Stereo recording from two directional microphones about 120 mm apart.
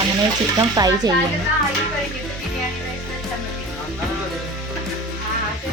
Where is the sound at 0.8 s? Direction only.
30° right (ahead or behind).